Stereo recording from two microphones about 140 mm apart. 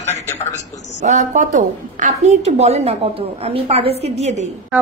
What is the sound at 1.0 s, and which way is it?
A woman's voice, 60° right (ahead or behind).